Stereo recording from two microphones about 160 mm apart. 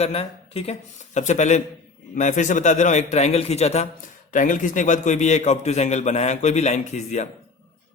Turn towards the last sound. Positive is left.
turn(degrees=45)  # may be behind; listen again after turning